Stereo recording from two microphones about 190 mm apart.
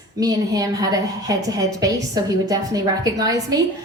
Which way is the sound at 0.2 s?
20° right (ahead or behind).